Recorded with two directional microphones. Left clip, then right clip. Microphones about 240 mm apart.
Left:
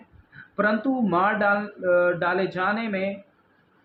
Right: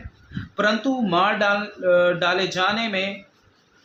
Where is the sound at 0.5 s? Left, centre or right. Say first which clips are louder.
Right 2 dB; right.